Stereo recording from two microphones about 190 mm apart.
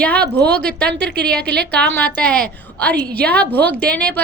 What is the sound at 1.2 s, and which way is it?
Speech, 55° right (ahead or behind).